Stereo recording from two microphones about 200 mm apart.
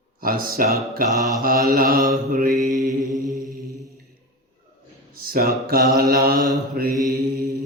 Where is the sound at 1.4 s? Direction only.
45° right (ahead or behind).